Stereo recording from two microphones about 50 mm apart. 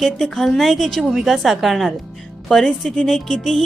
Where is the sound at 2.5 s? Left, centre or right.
Centre.